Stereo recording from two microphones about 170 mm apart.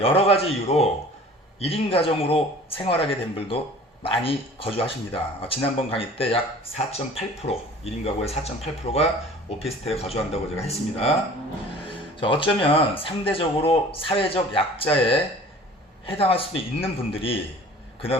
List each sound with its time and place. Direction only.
0.0 s speech: 35° left (ahead or behind)
12.2 s speech: 30° left (ahead or behind)